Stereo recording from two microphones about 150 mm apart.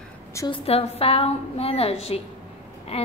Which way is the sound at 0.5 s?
40° left (ahead or behind).